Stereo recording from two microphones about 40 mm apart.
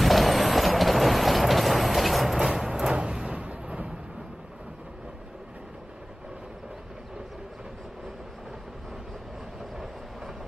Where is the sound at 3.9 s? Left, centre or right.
Centre.